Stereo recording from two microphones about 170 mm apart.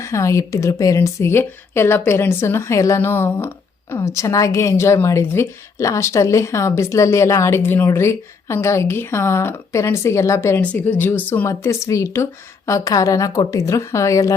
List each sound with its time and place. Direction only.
0.0 s speech: 15° left (ahead or behind)